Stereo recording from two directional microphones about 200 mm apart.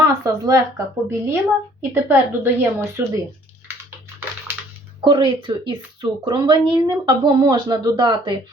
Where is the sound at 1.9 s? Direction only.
10° right (ahead or behind).